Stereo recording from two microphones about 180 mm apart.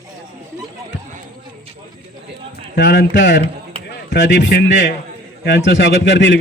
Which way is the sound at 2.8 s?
90° left.